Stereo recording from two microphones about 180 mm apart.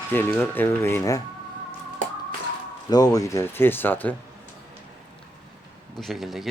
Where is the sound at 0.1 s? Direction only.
10° left (ahead or behind).